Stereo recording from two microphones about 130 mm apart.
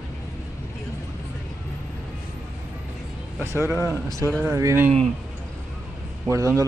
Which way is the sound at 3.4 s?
20° right (ahead or behind).